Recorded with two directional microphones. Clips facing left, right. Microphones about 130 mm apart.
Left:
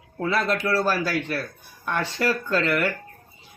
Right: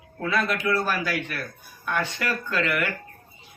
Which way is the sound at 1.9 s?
35° left (ahead or behind).